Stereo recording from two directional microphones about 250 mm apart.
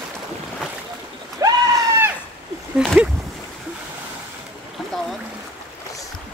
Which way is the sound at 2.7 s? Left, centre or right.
Centre.